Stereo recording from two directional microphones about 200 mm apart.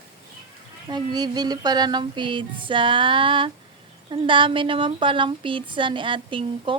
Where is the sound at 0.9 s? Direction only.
20° right (ahead or behind).